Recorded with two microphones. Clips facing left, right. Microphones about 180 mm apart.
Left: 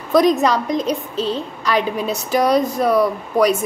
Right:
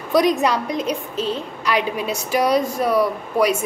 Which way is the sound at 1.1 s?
35° left (ahead or behind).